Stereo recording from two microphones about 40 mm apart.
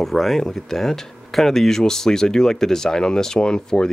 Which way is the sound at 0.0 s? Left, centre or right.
Centre.